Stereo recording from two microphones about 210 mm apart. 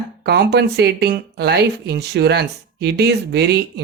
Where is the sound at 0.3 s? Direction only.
50° right (ahead or behind).